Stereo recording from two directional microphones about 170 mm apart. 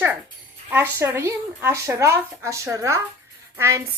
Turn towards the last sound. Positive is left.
turn(degrees=-15)  # may be behind; listen again after turning